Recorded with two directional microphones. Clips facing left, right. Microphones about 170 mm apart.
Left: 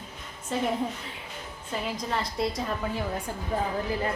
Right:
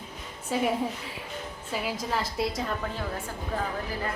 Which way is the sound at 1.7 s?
5° right (ahead or behind).